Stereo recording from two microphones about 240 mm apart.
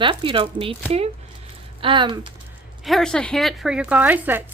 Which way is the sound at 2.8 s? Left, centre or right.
Centre.